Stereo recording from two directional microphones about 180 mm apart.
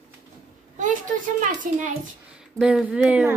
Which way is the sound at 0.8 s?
45° right (ahead or behind).